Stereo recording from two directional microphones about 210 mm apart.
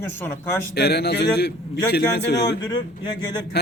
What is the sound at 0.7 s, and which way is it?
Speech, 50° left (ahead or behind).